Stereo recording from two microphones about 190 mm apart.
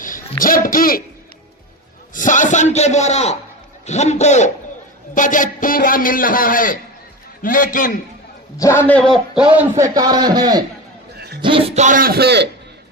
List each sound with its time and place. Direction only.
0.0 s a sound: 45° left (ahead or behind)
0.7 s a man's voice: 50° left (ahead or behind)
2.1 s a man's voice: 45° left (ahead or behind)
8.5 s a man's voice: 15° left (ahead or behind)
9.1 s a man's voice: 5° right (ahead or behind); by 12.5 s 60° right (ahead or behind)